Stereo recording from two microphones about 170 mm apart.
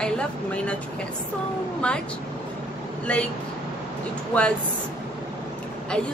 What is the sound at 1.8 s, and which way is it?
Speech, 5° left (ahead or behind).